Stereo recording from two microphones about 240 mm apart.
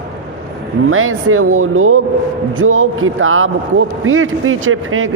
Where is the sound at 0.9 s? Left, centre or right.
Right.